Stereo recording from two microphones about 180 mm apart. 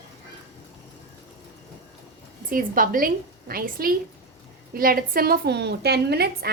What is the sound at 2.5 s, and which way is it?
A woman's voice, 50° right (ahead or behind).